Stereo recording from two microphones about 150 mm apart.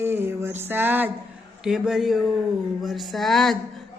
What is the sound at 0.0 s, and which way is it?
Speech, 15° right (ahead or behind).